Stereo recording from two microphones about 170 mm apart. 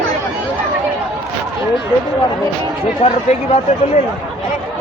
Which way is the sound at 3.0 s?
40° left (ahead or behind).